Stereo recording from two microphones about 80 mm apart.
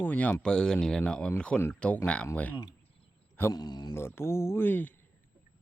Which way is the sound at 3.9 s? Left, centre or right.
Left.